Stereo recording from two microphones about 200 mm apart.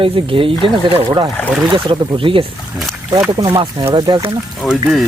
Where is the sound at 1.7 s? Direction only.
25° right (ahead or behind).